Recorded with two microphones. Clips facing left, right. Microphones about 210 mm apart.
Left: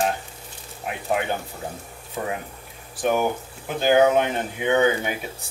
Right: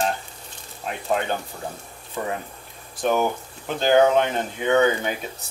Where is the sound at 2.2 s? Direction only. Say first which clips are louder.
Even; 15° left (ahead or behind).